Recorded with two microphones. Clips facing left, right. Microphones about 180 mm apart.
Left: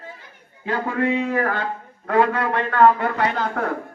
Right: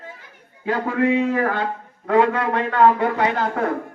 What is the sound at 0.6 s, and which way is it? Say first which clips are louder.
A man's voice: right 2 dB; 5° right (ahead or behind).